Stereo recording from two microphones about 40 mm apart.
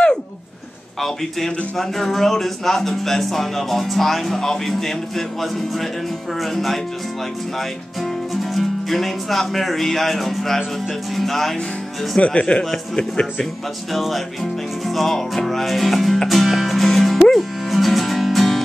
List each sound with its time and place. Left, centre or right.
1.8 s speech: centre
4.4 s music: centre
6.4 s speech: centre
12.2 s speech: left
13.9 s speech: centre
16.3 s music: centre